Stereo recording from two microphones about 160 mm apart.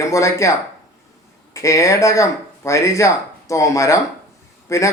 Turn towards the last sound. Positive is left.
turn(degrees=20)  # may be behind; listen again after turning